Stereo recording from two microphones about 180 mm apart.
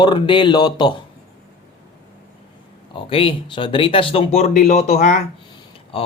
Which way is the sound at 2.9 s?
30° left (ahead or behind).